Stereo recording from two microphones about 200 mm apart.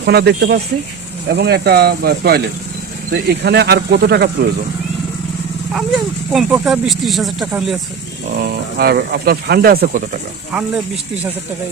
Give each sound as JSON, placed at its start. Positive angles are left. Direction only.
{"t": 0.0, "sound": "speech", "side_deg": -55}
{"t": 6.3, "sound": "speech", "side_deg": 0}
{"t": 8.4, "sound": "speech", "side_deg": -50}
{"t": 10.5, "sound": "speech", "side_deg": -5}